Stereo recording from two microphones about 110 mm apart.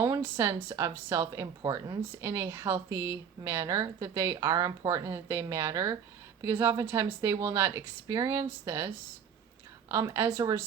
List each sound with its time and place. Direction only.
0.0 s a woman's voice: 20° right (ahead or behind)
2.2 s a woman's voice: 25° right (ahead or behind)
9.9 s a woman's voice: 25° right (ahead or behind)